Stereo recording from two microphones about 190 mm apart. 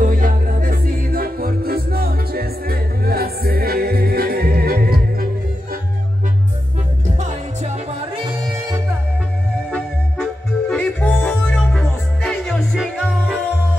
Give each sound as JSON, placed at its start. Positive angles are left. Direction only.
{"t": 0.0, "sound": "music", "side_deg": -45}
{"t": 7.2, "sound": "music", "side_deg": -35}
{"t": 10.7, "sound": "music", "side_deg": 5}